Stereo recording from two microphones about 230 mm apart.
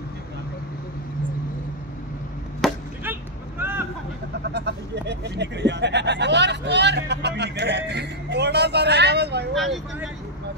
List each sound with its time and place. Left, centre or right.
2.6 s chop: centre
4.5 s speech: right
9.5 s speech: centre